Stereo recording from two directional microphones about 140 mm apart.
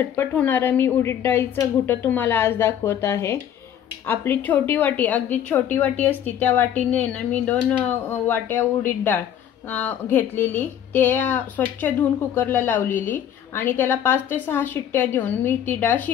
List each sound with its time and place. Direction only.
0.0 s speech: 15° left (ahead or behind)